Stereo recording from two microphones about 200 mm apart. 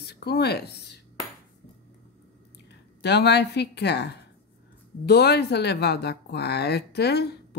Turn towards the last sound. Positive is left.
turn(degrees=55)  # may be behind; listen again after turning